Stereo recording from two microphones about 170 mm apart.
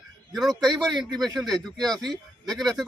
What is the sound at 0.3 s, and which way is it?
Speech, centre (ahead or behind).